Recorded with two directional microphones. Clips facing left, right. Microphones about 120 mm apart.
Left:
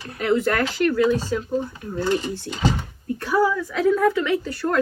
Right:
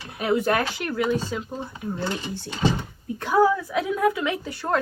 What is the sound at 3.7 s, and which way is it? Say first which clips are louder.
Speech: left 4 dB; 10° right (ahead or behind).